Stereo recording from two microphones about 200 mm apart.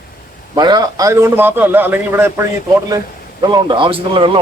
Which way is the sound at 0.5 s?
20° right (ahead or behind).